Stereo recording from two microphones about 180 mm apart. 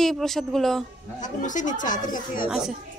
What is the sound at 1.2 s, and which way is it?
Speech, 45° left (ahead or behind).